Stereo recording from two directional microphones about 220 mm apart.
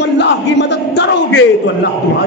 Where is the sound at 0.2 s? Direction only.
50° left (ahead or behind).